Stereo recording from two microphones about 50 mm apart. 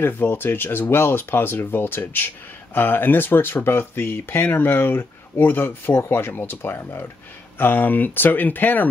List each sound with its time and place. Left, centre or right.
0.0 s speech: left